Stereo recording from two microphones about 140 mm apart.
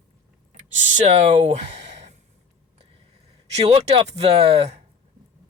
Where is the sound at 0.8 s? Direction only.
50° right (ahead or behind).